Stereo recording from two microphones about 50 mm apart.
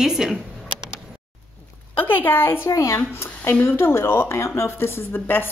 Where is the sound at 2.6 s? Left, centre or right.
Left.